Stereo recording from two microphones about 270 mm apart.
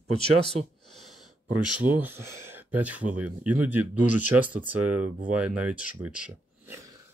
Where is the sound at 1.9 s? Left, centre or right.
Centre.